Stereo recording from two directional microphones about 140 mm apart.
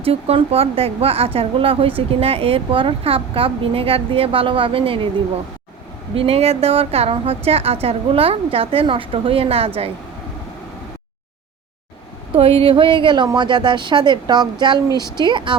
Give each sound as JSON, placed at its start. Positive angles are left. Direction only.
{"t": 0.0, "sound": "a woman's voice", "side_deg": -45}
{"t": 6.1, "sound": "a woman's voice", "side_deg": -45}
{"t": 12.3, "sound": "a woman's voice", "side_deg": -40}